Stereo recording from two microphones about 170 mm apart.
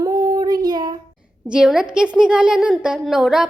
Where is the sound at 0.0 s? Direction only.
20° right (ahead or behind).